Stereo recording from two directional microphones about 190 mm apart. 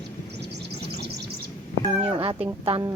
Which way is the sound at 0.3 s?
60° right (ahead or behind).